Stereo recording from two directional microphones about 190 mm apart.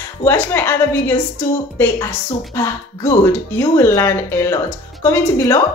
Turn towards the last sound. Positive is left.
turn(degrees=15)  # may be behind; listen again after turning